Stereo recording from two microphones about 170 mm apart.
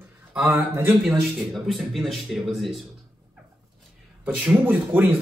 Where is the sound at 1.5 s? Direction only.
Centre (ahead or behind).